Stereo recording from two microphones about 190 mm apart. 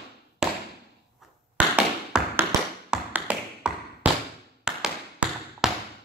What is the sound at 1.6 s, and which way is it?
Tap, 5° right (ahead or behind).